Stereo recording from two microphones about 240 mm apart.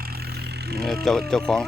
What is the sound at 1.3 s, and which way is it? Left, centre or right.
Speech, centre.